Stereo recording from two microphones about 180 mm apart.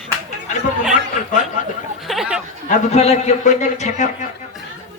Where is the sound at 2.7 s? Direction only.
35° left (ahead or behind).